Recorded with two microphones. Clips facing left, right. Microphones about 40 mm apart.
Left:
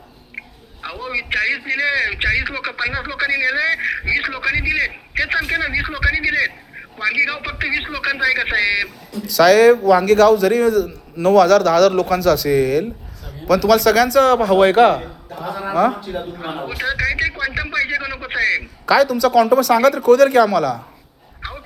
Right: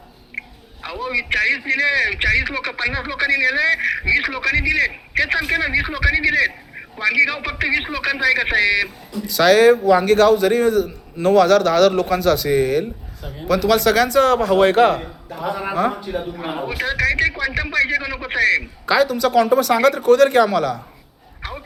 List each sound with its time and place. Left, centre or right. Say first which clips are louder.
0.3 s a man's voice: right 2 dB; centre
9.2 s speech: left 2 dB; right
14.3 s a man's voice: left 2 dB; centre
15.4 s speech: left 3 dB; centre
16.1 s a sound: right 1 dB; centre
18.9 s speech: left 3 dB; right